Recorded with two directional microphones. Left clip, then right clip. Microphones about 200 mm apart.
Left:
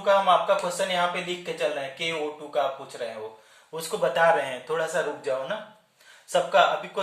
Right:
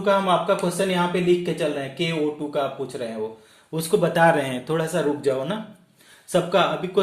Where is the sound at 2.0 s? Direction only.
40° right (ahead or behind).